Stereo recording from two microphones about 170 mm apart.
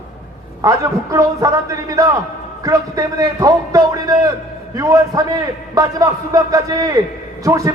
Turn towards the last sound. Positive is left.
turn(degrees=-20)  # may be behind; listen again after turning